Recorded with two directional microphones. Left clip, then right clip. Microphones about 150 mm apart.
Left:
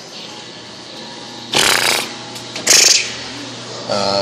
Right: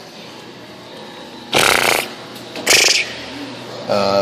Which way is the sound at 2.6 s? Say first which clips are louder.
Left 1 dB; 20° right (ahead or behind).